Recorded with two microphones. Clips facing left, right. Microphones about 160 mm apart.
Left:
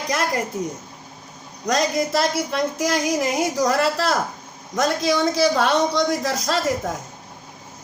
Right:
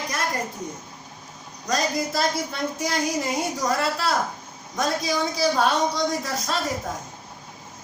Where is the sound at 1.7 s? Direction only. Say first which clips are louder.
Left 4 dB; 80° left.